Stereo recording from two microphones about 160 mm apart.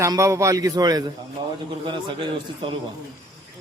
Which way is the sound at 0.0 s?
20° right (ahead or behind).